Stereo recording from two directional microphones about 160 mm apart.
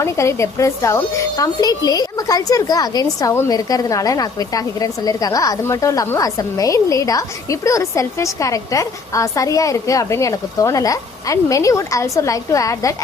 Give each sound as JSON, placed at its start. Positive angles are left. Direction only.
{"t": 0.0, "sound": "a woman's voice", "side_deg": 20}